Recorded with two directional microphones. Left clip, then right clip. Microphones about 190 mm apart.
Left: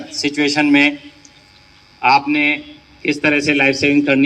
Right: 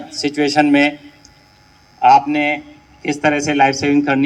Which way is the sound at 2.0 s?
35° right (ahead or behind).